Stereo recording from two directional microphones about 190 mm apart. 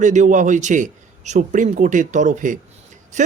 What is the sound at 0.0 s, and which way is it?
A man's voice, 40° right (ahead or behind).